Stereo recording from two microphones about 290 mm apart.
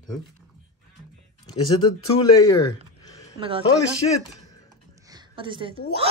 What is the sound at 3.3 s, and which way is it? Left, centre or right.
Speech, centre.